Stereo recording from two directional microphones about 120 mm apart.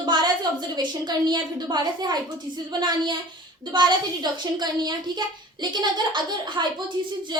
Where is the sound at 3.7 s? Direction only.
40° right (ahead or behind).